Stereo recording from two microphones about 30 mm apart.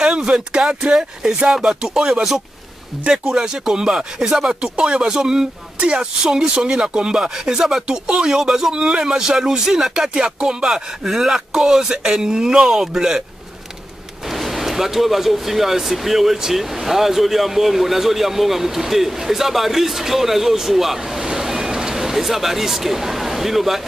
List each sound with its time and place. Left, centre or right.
0.0 s speech: right
1.5 s speech: centre
5.8 s speech: right
6.2 s speech: right
8.7 s speech: right
10.6 s speech: centre
14.2 s speech: centre
21.4 s a sound: centre